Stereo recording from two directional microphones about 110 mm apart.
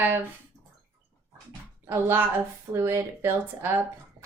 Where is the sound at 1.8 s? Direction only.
20° right (ahead or behind).